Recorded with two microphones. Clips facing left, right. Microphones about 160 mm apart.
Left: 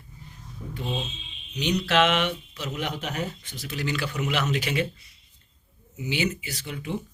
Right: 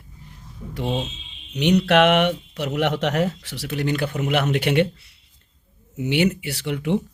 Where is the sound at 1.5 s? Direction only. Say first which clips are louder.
Right 6 dB; 60° right (ahead or behind).